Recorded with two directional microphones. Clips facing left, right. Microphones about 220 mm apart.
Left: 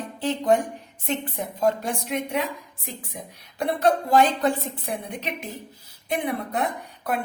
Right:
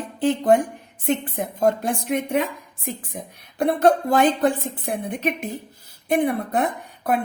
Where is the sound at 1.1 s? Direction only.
50° right (ahead or behind).